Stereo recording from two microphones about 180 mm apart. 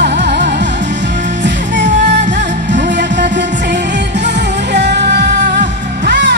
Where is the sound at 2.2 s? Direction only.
45° right (ahead or behind).